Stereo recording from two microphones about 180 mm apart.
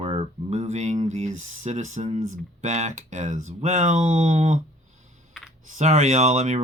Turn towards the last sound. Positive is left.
turn(degrees=-40)  # may be behind; listen again after turning